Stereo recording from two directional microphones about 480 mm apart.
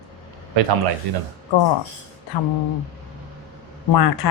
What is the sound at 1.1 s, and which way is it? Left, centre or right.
Speech, right.